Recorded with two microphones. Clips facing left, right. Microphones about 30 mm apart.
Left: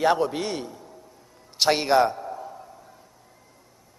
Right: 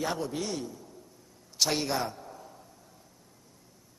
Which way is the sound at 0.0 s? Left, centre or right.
Left.